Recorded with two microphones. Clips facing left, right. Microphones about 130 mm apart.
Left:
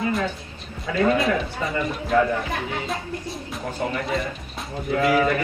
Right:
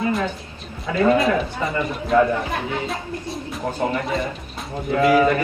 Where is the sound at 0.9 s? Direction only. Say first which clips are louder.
Right 3 dB; 30° right (ahead or behind).